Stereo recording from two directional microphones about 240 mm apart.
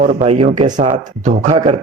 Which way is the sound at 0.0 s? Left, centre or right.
Right.